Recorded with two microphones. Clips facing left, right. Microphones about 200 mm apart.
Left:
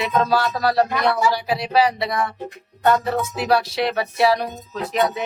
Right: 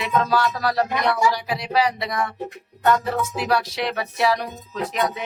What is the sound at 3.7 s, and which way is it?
Speech, 30° left (ahead or behind).